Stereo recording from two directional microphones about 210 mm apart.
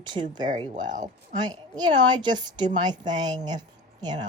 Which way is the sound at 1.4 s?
20° right (ahead or behind).